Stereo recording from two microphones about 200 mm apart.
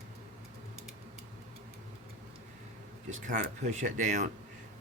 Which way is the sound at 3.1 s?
40° right (ahead or behind).